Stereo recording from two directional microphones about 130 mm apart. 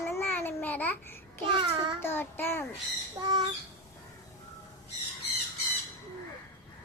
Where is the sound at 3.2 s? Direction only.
30° right (ahead or behind).